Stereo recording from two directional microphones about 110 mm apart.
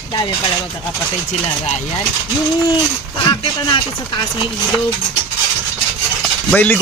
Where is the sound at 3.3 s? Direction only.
45° left (ahead or behind).